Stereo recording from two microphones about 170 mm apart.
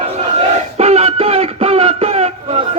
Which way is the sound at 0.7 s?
40° right (ahead or behind).